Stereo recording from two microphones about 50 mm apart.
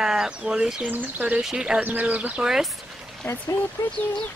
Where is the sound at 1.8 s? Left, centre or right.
Right.